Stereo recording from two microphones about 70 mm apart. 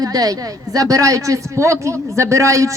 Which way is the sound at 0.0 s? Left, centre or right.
Right.